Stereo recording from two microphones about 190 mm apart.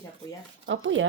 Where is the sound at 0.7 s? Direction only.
90° right.